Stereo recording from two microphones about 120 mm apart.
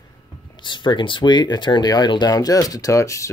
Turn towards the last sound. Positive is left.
turn(degrees=25)  # may be behind; listen again after turning